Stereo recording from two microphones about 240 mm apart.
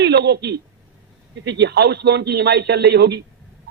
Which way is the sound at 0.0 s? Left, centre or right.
Right.